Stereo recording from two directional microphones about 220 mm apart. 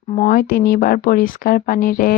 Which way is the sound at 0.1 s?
35° left (ahead or behind).